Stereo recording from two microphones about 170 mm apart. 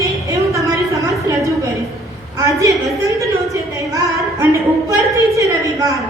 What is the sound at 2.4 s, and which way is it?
Speech, 20° right (ahead or behind).